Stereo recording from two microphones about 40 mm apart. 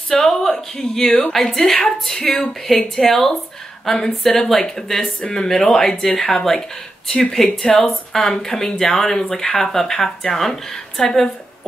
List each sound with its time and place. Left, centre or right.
0.1 s speech: centre
2.7 s speech: centre
7.1 s speech: left
7.5 s speech: centre